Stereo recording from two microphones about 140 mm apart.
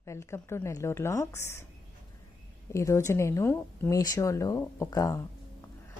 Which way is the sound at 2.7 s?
20° left (ahead or behind).